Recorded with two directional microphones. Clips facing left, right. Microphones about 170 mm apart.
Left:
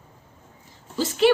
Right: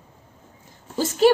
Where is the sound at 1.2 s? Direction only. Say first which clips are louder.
Right 2 dB; 45° right (ahead or behind).